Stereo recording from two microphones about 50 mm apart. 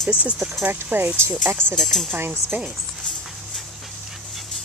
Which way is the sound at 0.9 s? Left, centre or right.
Right.